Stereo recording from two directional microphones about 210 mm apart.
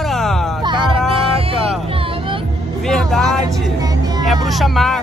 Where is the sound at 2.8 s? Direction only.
Centre (ahead or behind).